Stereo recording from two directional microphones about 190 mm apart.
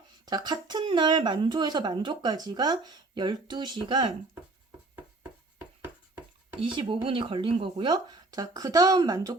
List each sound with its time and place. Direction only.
0.3 s speech: 20° right (ahead or behind)
6.6 s speech: 25° right (ahead or behind)